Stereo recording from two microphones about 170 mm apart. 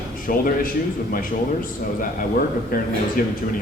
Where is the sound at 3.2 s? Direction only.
55° left (ahead or behind).